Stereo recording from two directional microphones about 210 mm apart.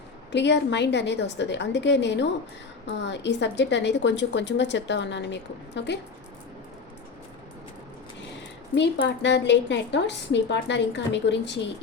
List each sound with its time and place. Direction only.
0.3 s a woman's voice: 55° left (ahead or behind)
9.2 s a woman's voice: 55° left (ahead or behind)